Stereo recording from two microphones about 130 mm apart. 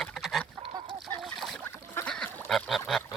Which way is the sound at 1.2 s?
Centre (ahead or behind).